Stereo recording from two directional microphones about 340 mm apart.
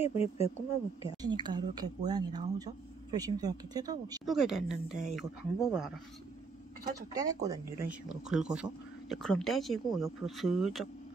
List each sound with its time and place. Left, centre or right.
0.0 s speech: centre
1.2 s speech: centre
7.2 s speech: centre